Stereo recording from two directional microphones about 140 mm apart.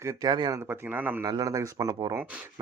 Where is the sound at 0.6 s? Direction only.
15° right (ahead or behind).